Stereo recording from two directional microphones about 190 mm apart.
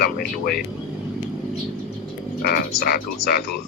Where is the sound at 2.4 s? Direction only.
55° left (ahead or behind).